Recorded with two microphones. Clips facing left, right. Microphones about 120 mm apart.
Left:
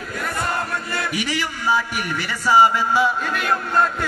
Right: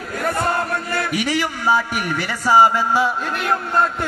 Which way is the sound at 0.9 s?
50° right (ahead or behind).